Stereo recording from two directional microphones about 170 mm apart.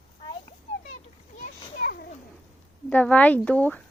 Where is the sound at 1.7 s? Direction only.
65° left (ahead or behind).